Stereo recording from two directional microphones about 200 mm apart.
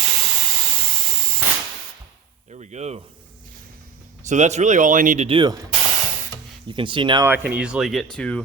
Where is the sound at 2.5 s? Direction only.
35° right (ahead or behind).